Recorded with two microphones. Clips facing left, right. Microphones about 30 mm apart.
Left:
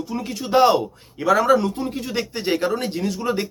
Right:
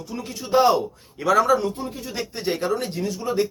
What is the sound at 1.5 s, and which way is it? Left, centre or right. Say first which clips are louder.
Speech: left 3 dB; left.